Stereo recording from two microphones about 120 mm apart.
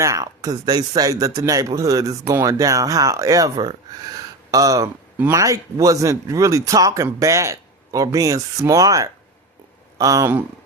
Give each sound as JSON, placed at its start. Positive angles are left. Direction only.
{"t": 0.0, "sound": "speech", "side_deg": -25}